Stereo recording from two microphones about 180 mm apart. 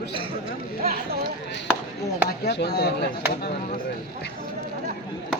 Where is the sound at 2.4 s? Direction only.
65° left (ahead or behind).